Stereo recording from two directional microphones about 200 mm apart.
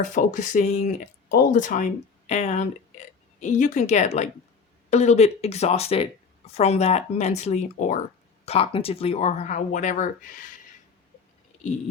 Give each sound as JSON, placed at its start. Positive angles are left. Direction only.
{"t": 0.0, "sound": "speech", "side_deg": 40}